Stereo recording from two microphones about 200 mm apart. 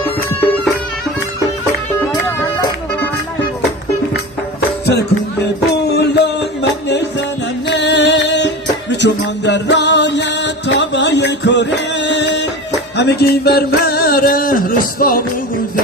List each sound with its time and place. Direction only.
0.3 s music: 10° left (ahead or behind)
5.9 s music: 55° left (ahead or behind)